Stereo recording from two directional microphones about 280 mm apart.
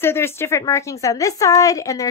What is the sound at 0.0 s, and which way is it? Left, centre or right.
A woman's voice, centre.